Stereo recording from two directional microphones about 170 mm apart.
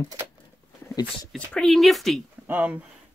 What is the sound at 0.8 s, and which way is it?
Speech, 20° left (ahead or behind).